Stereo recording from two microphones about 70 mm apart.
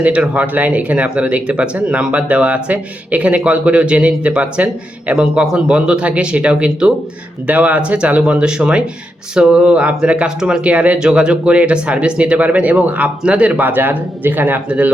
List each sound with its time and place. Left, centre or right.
0.0 s speech: centre